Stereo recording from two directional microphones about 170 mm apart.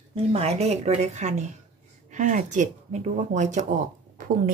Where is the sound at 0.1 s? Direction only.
35° right (ahead or behind).